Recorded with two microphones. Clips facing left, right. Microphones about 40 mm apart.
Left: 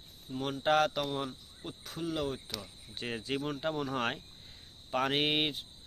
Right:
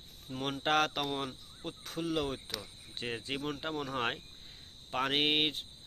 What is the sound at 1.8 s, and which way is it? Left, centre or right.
Speech, right.